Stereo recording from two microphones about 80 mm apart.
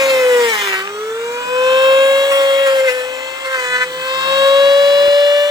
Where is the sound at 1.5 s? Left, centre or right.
Right.